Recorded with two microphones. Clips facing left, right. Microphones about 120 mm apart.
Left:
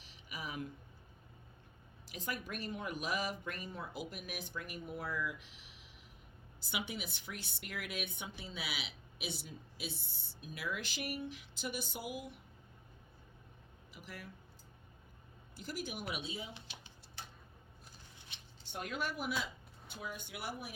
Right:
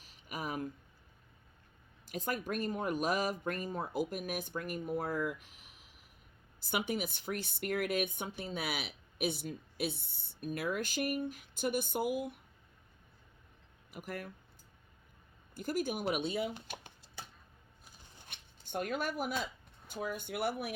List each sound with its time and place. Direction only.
0.0 s a sound: 45° right (ahead or behind)
2.0 s speech: 45° right (ahead or behind)
13.9 s speech: 50° right (ahead or behind)
15.5 s speech: 50° right (ahead or behind)
16.1 s speech: 60° right (ahead or behind)
18.2 s scissors: 50° right (ahead or behind)
19.9 s speech: 50° right (ahead or behind)